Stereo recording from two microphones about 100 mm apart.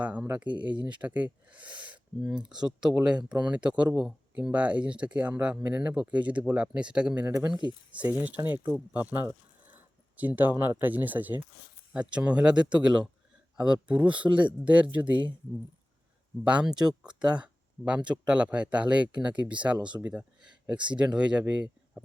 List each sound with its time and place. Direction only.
0.0 s speech: 15° right (ahead or behind)
16.4 s speech: 10° right (ahead or behind)